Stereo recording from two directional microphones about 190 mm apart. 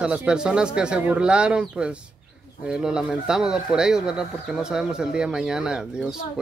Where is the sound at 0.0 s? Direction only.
5° right (ahead or behind).